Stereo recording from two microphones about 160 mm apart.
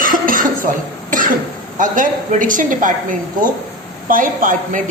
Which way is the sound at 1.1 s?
55° right (ahead or behind).